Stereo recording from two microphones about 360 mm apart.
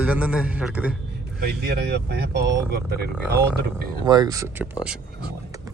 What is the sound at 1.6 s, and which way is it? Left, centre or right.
Speech, right.